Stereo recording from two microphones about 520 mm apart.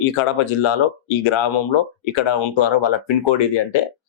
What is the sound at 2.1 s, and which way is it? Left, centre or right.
A man's voice, left.